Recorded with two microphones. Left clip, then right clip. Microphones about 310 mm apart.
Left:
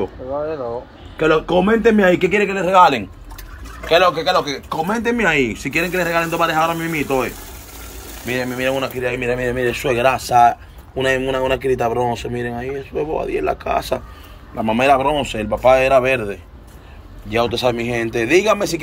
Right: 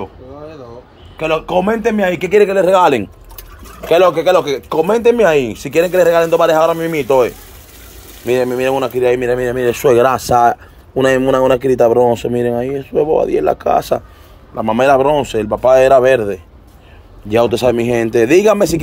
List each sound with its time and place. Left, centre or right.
1.1 s speech: centre; by 18.7 s right